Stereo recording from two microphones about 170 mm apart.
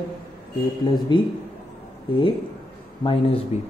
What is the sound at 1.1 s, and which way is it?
Speech, 30° left (ahead or behind).